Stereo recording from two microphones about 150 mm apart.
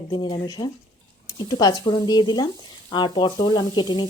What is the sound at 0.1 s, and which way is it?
Speech, 30° left (ahead or behind).